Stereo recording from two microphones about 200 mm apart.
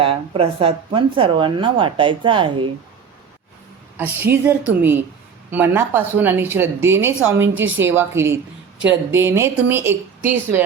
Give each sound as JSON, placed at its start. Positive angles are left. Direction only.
{"t": 0.0, "sound": "speech", "side_deg": -30}
{"t": 3.9, "sound": "a woman's voice", "side_deg": -10}